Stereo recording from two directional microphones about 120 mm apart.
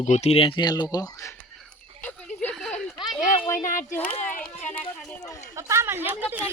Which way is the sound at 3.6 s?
90° left.